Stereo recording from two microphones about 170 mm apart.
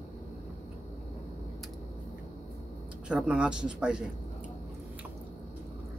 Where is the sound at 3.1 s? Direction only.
5° right (ahead or behind).